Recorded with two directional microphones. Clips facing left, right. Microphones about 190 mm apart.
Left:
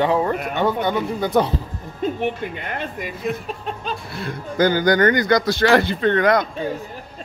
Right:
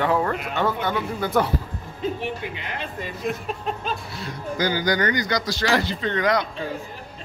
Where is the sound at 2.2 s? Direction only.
50° left (ahead or behind).